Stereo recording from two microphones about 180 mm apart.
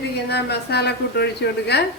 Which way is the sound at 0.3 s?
65° left (ahead or behind).